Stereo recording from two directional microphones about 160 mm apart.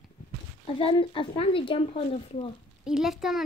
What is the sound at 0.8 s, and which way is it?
Speech, 30° left (ahead or behind).